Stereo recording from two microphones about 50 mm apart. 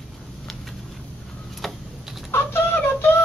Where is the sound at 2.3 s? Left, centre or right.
Left.